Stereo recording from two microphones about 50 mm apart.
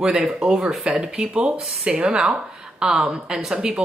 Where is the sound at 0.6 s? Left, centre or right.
Centre.